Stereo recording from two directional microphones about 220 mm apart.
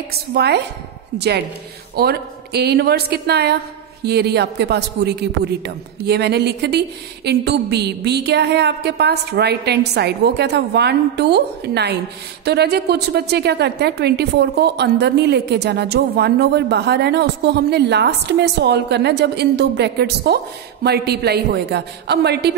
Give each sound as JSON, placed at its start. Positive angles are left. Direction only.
{"t": 0.3, "sound": "a woman's voice", "side_deg": -50}